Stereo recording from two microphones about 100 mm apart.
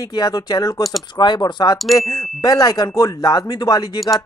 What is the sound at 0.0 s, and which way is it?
Speech, 40° left (ahead or behind).